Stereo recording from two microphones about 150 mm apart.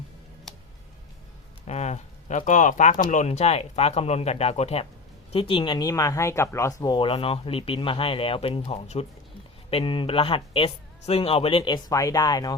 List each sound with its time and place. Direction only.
1.6 s speech: 45° left (ahead or behind); by 12.5 s 25° left (ahead or behind)